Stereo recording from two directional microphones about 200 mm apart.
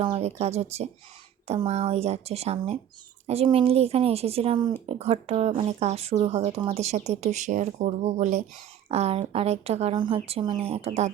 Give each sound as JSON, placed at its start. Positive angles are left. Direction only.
{"t": 0.0, "sound": "speech", "side_deg": -30}